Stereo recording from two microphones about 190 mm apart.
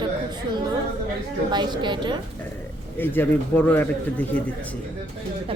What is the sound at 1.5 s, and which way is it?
Speech, 25° right (ahead or behind).